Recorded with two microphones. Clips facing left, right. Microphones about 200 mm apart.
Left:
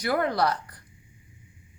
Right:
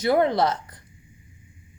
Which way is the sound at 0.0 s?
25° right (ahead or behind).